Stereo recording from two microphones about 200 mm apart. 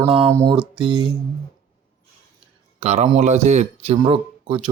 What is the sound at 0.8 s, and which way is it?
Speech, 25° right (ahead or behind).